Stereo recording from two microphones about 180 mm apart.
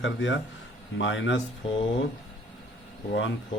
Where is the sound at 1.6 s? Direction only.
30° left (ahead or behind).